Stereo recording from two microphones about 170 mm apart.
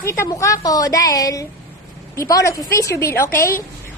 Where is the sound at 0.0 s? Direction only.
15° left (ahead or behind).